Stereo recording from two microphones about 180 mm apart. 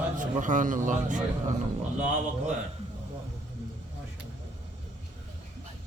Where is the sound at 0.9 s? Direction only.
45° right (ahead or behind).